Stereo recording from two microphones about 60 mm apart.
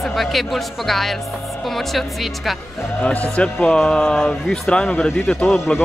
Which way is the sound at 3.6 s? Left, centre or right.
Centre.